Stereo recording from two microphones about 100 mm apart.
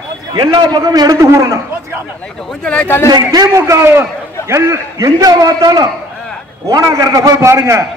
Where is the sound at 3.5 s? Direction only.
30° right (ahead or behind).